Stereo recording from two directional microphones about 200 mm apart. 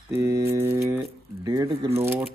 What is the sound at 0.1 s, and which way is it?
Mantra, 15° right (ahead or behind).